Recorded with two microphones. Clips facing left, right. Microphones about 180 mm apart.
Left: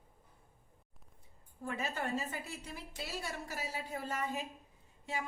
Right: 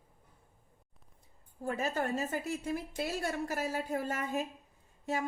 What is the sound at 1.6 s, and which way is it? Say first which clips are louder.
A woman's voice: right 5 dB; 40° right (ahead or behind).